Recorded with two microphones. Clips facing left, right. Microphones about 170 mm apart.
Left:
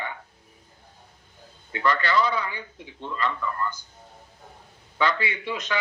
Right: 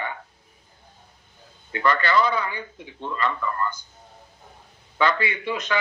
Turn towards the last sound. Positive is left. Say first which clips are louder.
# right 3 dB
turn(degrees=-55)  # may be behind; listen again after turning